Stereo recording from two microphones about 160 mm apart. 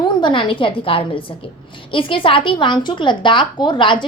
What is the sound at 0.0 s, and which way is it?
A woman's voice, 30° left (ahead or behind).